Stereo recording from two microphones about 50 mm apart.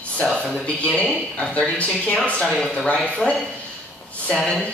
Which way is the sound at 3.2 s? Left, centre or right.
Centre.